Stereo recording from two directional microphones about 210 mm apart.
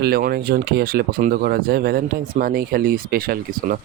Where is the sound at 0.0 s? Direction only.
45° right (ahead or behind).